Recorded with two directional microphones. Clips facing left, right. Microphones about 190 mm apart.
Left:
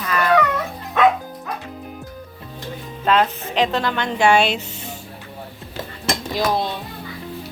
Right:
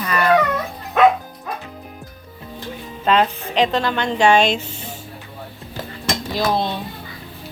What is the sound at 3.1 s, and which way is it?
Speech, 5° left (ahead or behind).